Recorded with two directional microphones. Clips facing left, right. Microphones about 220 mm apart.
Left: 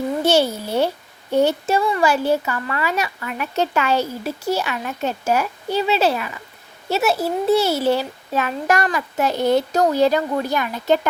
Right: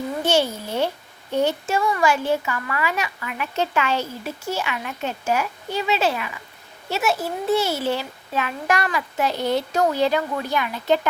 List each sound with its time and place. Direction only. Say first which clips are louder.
0.3 s a child's voice: left 3 dB; 40° left (ahead or behind)